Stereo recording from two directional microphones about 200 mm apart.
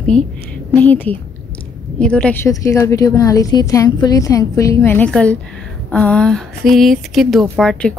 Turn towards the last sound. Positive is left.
turn(degrees=0)  # may be behind; listen again after turning